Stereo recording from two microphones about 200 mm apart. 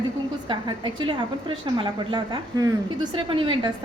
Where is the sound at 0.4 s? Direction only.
25° right (ahead or behind).